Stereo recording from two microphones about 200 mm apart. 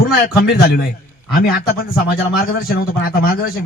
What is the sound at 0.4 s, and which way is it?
Speech, 50° left (ahead or behind).